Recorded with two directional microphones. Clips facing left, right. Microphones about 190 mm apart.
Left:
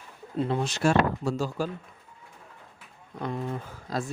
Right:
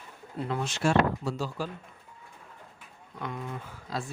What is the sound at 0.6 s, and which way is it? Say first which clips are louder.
Speech: even; 40° left (ahead or behind).